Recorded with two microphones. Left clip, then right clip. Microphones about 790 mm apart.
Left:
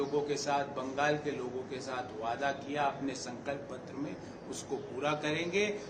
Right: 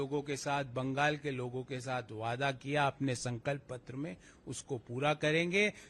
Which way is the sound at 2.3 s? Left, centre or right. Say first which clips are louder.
Right 2 dB; right.